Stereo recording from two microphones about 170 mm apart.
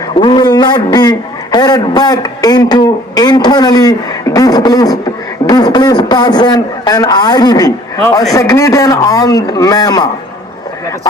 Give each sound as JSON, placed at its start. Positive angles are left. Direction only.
{"t": 0.2, "sound": "a man's voice", "side_deg": 25}